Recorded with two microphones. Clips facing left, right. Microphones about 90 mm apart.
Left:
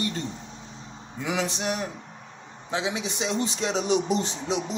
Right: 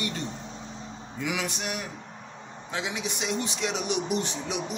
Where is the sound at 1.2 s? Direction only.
30° left (ahead or behind).